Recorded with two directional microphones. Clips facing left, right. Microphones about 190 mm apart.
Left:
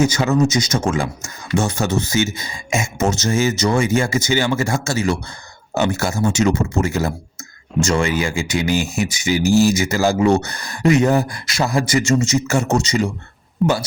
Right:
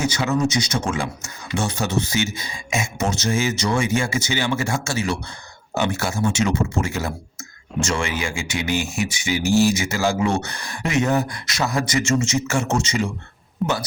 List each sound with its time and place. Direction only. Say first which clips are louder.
0.0 s speech: left 5 dB; 45° left (ahead or behind)
13.6 s speech: left 5 dB; centre (ahead or behind)